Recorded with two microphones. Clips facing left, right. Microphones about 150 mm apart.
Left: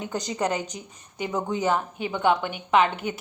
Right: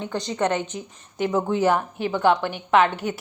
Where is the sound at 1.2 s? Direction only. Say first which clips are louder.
Right 5 dB; 5° right (ahead or behind).